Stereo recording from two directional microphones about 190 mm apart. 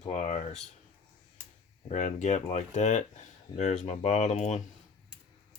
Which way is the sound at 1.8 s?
40° left (ahead or behind).